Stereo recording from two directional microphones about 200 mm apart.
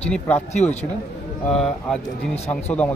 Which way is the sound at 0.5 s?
35° left (ahead or behind).